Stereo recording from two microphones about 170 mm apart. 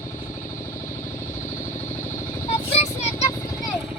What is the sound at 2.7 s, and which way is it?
Vehicle, 40° left (ahead or behind).